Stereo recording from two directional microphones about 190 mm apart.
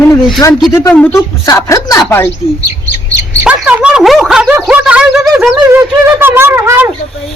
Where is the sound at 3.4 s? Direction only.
5° right (ahead or behind).